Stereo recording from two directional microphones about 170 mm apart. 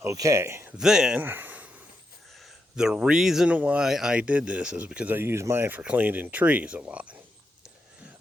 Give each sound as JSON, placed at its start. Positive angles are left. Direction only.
{"t": 0.0, "sound": "speech", "side_deg": -20}
{"t": 0.8, "sound": "speech", "side_deg": -5}